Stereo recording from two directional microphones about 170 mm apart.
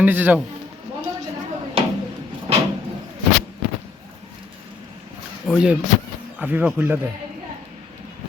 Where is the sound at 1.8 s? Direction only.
35° right (ahead or behind).